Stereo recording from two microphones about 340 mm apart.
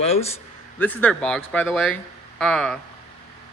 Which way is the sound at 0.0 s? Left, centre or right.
Centre.